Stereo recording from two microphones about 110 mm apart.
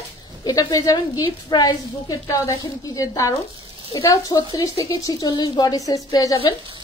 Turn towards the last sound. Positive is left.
turn(degrees=35)  # may be behind; listen again after turning